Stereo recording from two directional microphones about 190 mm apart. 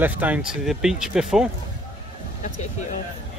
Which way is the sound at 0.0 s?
10° right (ahead or behind).